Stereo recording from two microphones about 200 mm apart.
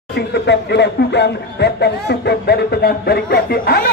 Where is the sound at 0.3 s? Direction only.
55° left (ahead or behind).